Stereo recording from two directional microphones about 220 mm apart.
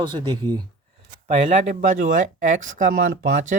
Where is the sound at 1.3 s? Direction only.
30° right (ahead or behind).